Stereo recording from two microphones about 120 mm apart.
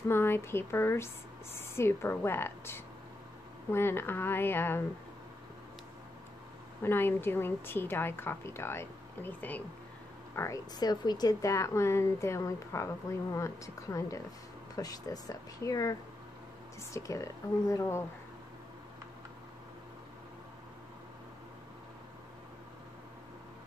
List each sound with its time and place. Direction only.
0.1 s a woman's voice: 20° left (ahead or behind)
6.8 s a woman's voice: 20° left (ahead or behind)
10.8 s a woman's voice: 35° left (ahead or behind)